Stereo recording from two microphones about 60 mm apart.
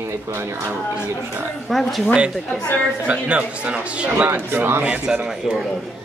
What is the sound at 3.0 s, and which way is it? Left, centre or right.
Speech, right.